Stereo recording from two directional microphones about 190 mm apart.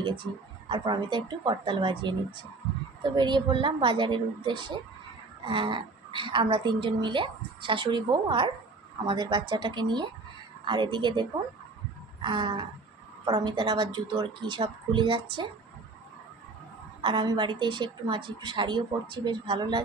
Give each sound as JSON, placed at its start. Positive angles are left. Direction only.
{"t": 0.3, "sound": "speech", "side_deg": 10}
{"t": 0.7, "sound": "a woman's voice", "side_deg": -25}
{"t": 12.2, "sound": "a sound", "side_deg": -25}
{"t": 13.2, "sound": "a woman's voice", "side_deg": -20}
{"t": 17.0, "sound": "a woman's voice", "side_deg": -25}